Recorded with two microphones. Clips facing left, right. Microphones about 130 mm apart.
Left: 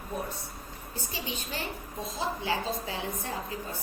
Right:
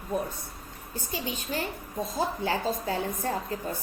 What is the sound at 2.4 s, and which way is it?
Speech, 50° right (ahead or behind).